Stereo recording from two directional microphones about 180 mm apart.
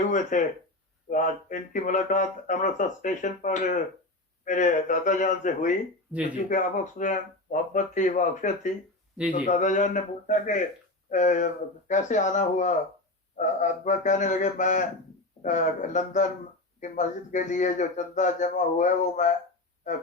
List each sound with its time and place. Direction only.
0.0 s speech: 45° left (ahead or behind)